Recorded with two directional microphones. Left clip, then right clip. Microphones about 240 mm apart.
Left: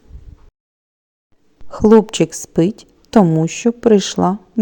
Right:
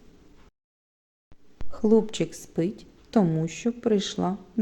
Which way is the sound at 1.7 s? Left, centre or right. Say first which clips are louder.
Left 11 dB; left.